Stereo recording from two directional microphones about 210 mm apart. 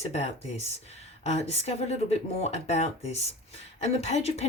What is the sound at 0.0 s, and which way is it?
Speech, 30° left (ahead or behind).